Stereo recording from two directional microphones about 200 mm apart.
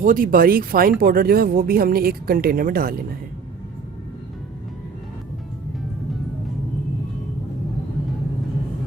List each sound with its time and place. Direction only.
0.0 s speech: 45° right (ahead or behind)